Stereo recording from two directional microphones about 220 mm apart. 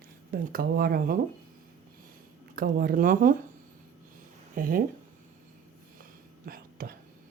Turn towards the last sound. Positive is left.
turn(degrees=-40)  # may be behind; listen again after turning